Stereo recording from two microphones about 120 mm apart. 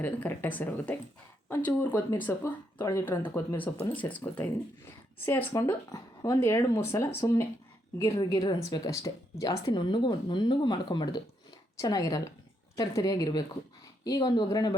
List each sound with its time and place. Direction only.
0.0 s speech: 15° left (ahead or behind)
5.9 s speech: 30° left (ahead or behind)
8.2 s speech: 35° left (ahead or behind)
9.8 s speech: 40° left (ahead or behind)